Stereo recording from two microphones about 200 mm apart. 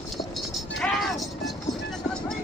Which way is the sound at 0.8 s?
Centre (ahead or behind).